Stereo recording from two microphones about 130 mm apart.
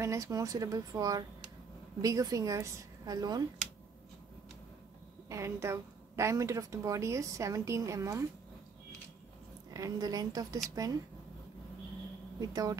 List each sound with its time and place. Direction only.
0.0 s a woman's voice: 25° right (ahead or behind)
5.3 s a woman's voice: 20° right (ahead or behind)
9.8 s a woman's voice: 30° right (ahead or behind)
12.4 s a woman's voice: 30° right (ahead or behind)